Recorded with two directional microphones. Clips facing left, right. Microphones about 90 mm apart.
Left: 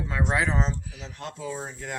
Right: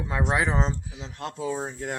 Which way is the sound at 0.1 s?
15° right (ahead or behind).